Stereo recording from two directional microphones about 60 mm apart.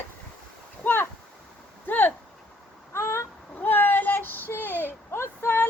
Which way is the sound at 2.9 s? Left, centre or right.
Left.